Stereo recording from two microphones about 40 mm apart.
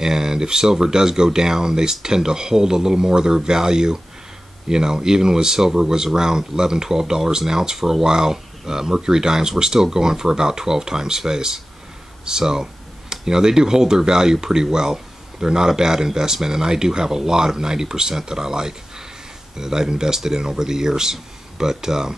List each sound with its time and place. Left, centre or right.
0.0 s speech: centre